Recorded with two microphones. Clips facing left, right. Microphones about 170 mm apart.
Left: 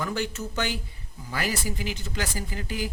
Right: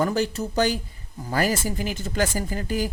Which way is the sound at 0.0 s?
40° right (ahead or behind).